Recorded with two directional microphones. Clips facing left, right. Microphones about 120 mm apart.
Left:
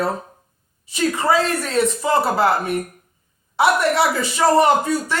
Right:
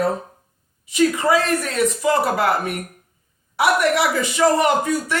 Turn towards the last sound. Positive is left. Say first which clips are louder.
# left 2 dB
turn(degrees=30)  # may be behind; listen again after turning